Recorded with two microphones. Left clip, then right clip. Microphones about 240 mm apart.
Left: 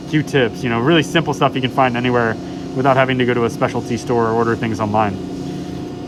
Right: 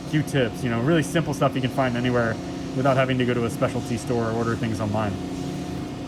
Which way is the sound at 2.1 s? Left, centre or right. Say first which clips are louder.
Left 6 dB; left.